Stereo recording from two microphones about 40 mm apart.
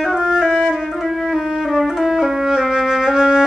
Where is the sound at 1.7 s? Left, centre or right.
Centre.